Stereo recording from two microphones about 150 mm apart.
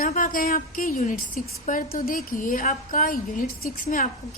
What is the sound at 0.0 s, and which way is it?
A woman's voice, 65° left (ahead or behind).